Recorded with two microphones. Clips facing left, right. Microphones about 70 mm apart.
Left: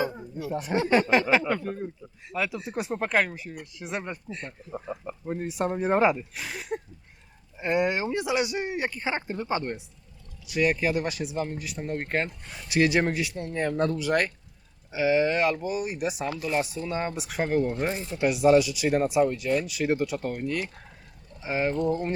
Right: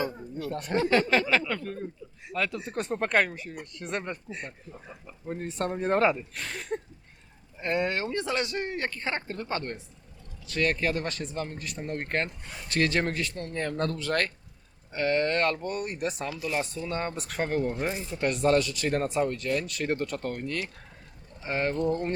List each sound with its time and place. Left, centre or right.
0.0 s speech: centre
4.3 s speech: centre
4.7 s speech: left
5.2 s speech: centre